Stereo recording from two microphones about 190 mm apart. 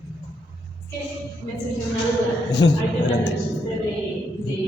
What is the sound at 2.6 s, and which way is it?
Speech, 75° left (ahead or behind).